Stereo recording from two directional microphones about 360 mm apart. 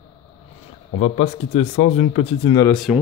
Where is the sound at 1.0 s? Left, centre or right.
Centre.